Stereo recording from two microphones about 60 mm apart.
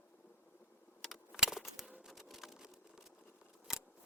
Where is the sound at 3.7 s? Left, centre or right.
Centre.